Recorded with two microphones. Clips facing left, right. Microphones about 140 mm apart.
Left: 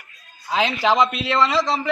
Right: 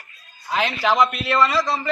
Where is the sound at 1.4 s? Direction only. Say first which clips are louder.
Left 1 dB; 20° left (ahead or behind).